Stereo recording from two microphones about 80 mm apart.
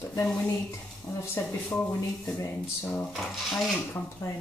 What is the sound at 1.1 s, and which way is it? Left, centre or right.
Speech, left.